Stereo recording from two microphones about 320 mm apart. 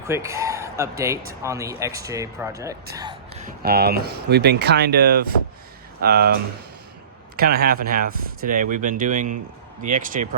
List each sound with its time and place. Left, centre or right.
0.1 s speech: centre
2.9 s a sound: centre
3.6 s speech: right
7.3 s speech: right